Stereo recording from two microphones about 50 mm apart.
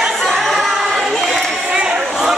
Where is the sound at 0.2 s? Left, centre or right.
Centre.